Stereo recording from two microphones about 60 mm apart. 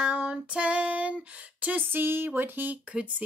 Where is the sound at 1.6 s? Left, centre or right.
Right.